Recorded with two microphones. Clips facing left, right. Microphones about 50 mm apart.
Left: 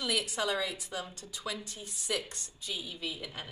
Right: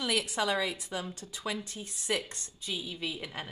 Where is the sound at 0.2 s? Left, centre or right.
Right.